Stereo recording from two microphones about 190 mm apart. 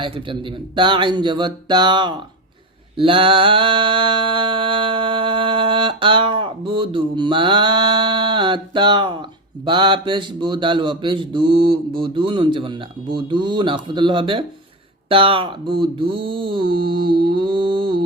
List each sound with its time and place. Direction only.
0.8 s speech: 25° right (ahead or behind)
3.0 s mantra: 30° right (ahead or behind)
9.6 s speech: 25° right (ahead or behind)